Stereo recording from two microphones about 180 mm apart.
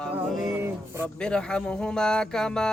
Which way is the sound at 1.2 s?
5° left (ahead or behind).